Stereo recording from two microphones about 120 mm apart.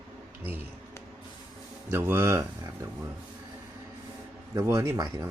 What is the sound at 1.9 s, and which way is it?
Speech, 20° right (ahead or behind).